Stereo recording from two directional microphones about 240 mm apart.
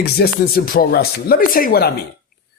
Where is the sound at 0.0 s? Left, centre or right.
Left.